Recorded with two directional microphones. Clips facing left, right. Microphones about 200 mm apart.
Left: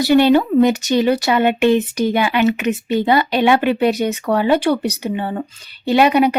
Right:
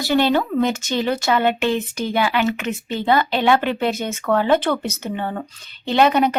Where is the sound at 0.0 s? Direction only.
15° left (ahead or behind).